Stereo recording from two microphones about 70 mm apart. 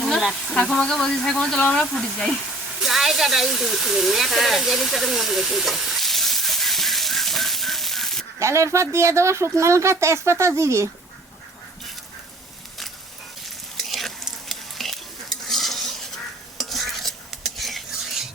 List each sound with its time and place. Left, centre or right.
0.0 s a sound: centre
0.5 s speech: centre
2.8 s hiss: centre
8.4 s speech: right
13.7 s stir: centre